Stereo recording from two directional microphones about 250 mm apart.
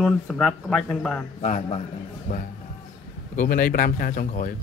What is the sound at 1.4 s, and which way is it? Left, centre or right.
Speech, left.